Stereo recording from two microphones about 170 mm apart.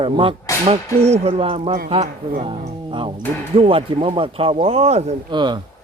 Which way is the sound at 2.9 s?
30° right (ahead or behind).